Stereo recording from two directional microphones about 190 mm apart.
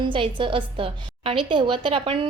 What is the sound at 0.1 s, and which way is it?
A woman's voice, 25° right (ahead or behind).